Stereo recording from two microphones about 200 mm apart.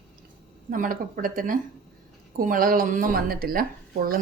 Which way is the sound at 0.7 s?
45° right (ahead or behind).